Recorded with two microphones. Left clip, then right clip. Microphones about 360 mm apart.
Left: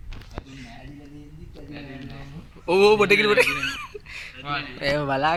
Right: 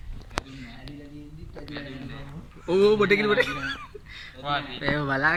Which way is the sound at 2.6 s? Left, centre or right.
Centre.